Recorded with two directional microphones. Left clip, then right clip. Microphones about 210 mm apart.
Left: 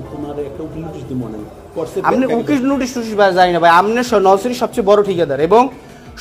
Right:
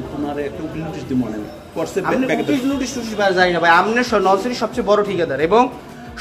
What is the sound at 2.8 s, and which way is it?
A man's voice, 50° left (ahead or behind).